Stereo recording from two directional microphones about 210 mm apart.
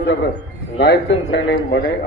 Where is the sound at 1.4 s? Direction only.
55° left (ahead or behind).